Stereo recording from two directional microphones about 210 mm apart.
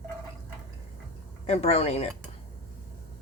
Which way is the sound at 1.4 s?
30° left (ahead or behind).